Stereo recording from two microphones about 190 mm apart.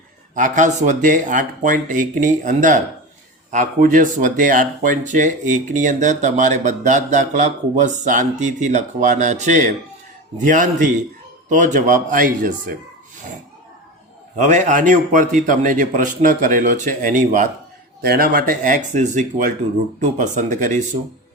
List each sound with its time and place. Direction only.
0.3 s a man's voice: 40° right (ahead or behind)
14.3 s a man's voice: 40° right (ahead or behind)